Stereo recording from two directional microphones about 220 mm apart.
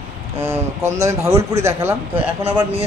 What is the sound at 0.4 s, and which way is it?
Speech, 10° right (ahead or behind).